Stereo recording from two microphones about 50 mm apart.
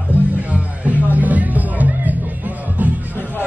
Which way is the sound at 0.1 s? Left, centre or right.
Right.